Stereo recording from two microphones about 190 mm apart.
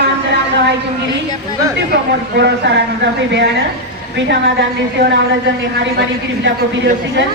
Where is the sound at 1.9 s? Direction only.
65° right (ahead or behind).